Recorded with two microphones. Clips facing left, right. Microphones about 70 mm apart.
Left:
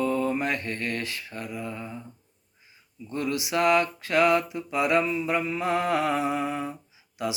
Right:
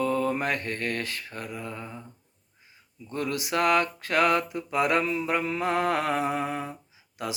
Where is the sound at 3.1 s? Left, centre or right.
Right.